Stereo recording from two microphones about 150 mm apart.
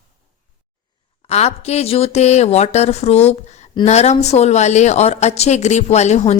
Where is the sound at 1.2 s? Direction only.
45° left (ahead or behind).